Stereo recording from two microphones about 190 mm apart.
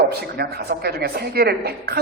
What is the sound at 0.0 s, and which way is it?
A man's voice, 55° right (ahead or behind).